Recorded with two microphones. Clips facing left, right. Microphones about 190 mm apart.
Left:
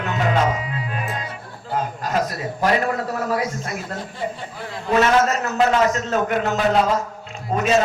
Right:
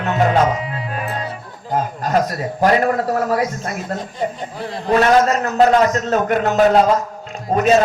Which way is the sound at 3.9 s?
45° right (ahead or behind).